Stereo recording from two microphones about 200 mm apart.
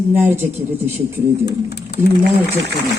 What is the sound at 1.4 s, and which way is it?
Speech, 55° left (ahead or behind).